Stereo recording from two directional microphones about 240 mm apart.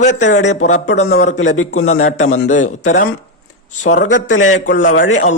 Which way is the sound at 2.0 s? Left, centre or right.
Left.